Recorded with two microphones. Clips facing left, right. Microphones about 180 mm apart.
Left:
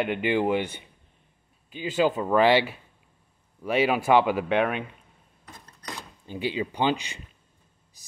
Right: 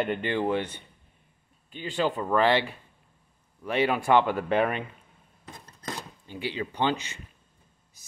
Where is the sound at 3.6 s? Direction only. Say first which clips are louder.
Left 2 dB; 10° left (ahead or behind).